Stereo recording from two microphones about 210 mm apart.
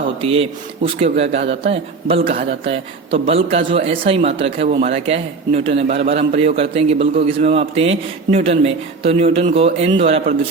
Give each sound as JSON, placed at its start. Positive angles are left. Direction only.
{"t": 0.2, "sound": "a man's voice", "side_deg": -25}